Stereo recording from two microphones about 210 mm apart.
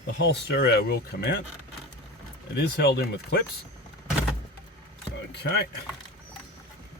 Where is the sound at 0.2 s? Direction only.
50° left (ahead or behind).